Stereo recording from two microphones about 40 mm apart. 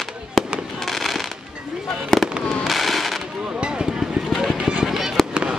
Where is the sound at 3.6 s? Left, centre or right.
Right.